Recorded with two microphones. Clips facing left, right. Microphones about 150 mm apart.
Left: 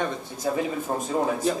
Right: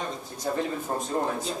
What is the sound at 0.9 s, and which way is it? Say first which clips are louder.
Speech: left 2 dB; 5° left (ahead or behind).